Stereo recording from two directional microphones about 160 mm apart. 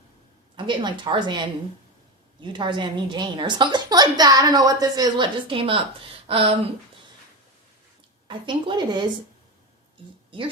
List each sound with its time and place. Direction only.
0.5 s a woman's voice: 30° right (ahead or behind)
8.3 s a woman's voice: 30° right (ahead or behind)